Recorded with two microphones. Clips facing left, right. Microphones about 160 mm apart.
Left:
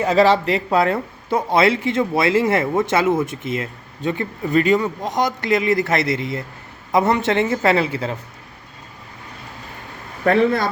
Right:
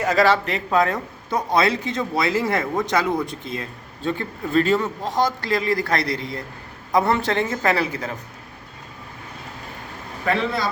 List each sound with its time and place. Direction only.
0.2 s a man's voice: 35° left (ahead or behind)
10.2 s speech: 55° left (ahead or behind)